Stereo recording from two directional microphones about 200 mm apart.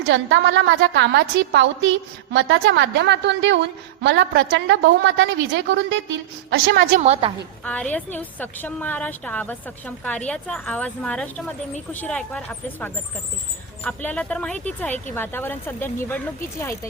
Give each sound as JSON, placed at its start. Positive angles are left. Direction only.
{"t": 0.1, "sound": "a woman's voice", "side_deg": -65}
{"t": 6.9, "sound": "a woman's voice", "side_deg": -35}
{"t": 7.6, "sound": "a woman's voice", "side_deg": 5}